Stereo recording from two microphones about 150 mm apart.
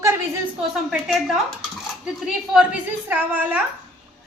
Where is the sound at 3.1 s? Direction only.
10° right (ahead or behind).